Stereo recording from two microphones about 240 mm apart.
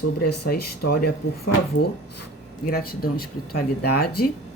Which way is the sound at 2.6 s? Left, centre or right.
Left.